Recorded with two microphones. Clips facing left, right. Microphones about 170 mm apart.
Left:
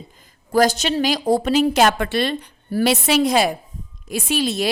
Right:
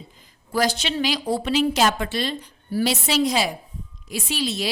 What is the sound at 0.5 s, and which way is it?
A woman's voice, 45° left (ahead or behind).